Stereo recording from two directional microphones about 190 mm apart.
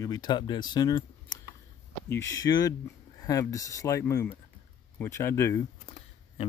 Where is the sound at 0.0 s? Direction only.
20° left (ahead or behind).